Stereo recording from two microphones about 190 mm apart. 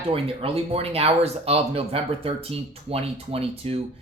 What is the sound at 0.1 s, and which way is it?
Speech, 30° right (ahead or behind).